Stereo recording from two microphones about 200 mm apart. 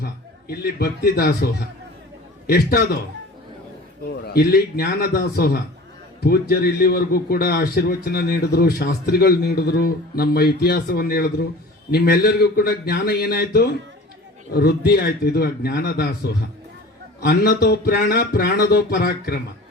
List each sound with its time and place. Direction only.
0.0 s a man's voice: 50° left (ahead or behind)
2.5 s a man's voice: 50° left (ahead or behind)
4.1 s a man's voice: 50° left (ahead or behind)